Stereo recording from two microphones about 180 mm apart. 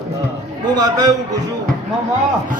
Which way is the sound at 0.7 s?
20° right (ahead or behind).